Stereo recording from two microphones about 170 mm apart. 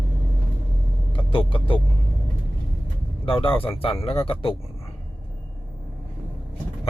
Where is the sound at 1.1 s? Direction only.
30° left (ahead or behind).